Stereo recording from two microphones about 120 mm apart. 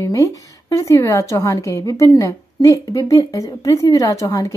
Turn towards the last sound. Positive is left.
turn(degrees=30)  # may be behind; listen again after turning